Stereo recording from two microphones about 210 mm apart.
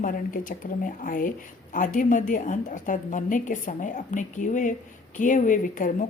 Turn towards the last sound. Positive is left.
turn(degrees=40)  # may be behind; listen again after turning